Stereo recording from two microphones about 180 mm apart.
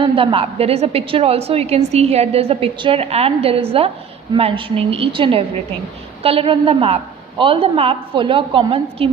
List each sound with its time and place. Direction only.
0.0 s a woman's voice: 30° right (ahead or behind)